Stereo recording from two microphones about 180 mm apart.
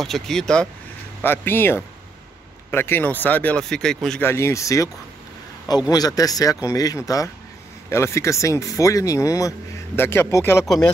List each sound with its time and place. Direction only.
0.0 s speech: centre (ahead or behind)
4.3 s speech: 15° left (ahead or behind)